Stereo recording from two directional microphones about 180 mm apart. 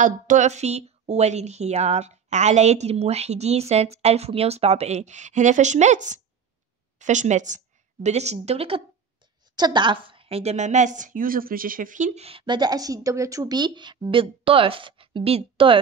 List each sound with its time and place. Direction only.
0.0 s a woman's voice: 45° right (ahead or behind)